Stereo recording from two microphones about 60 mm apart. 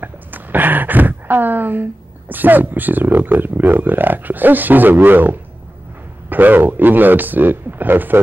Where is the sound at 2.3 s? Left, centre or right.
Right.